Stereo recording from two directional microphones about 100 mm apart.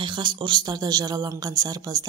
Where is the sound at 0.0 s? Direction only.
50° right (ahead or behind).